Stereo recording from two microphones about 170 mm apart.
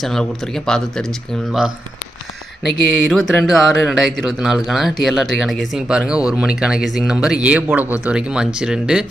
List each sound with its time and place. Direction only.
0.0 s speech: centre (ahead or behind)
2.6 s speech: centre (ahead or behind)